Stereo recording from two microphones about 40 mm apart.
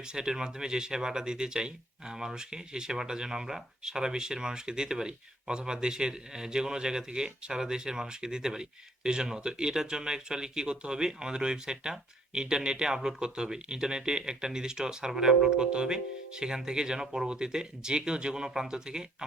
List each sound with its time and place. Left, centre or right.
0.0 s speech: centre